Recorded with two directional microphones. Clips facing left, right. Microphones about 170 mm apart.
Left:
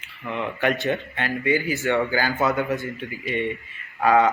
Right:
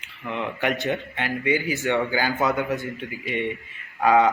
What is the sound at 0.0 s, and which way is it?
A man's voice, 15° right (ahead or behind).